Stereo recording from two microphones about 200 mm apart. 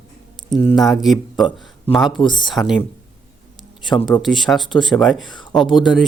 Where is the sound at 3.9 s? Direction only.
Centre (ahead or behind).